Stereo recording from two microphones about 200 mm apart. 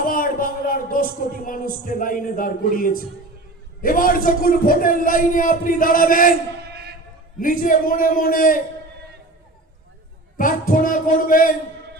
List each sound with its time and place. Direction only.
0.0 s a man's voice: 45° left (ahead or behind)
7.3 s a man's voice: 45° left (ahead or behind)
10.3 s a man's voice: 45° left (ahead or behind)